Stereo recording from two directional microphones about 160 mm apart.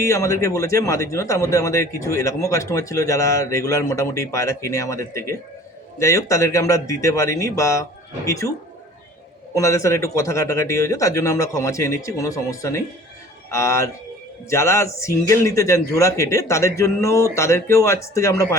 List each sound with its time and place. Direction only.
0.0 s speech: 20° left (ahead or behind)
9.6 s speech: 20° left (ahead or behind)